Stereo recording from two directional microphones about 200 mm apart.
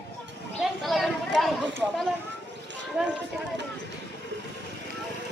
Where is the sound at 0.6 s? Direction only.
Centre (ahead or behind).